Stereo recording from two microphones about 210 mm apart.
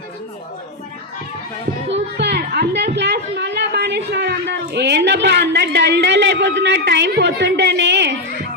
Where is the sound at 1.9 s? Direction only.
55° right (ahead or behind).